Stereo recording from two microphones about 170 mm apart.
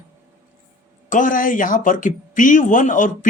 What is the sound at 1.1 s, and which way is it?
Speech, 50° left (ahead or behind).